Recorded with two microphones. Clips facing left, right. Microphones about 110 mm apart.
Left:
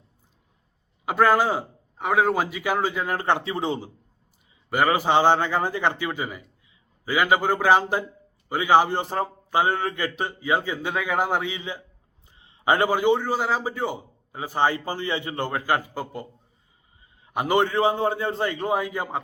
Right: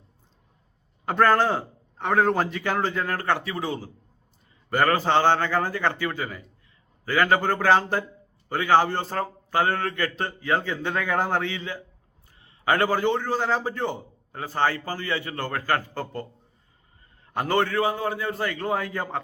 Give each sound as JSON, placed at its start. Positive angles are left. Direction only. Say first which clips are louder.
{"t": 1.0, "sound": "a man's voice", "louder": "even", "side_deg": 10}
{"t": 4.7, "sound": "a man's voice", "louder": "left 1 dB", "side_deg": 10}
{"t": 17.2, "sound": "a man's voice", "louder": "left 2 dB", "side_deg": 15}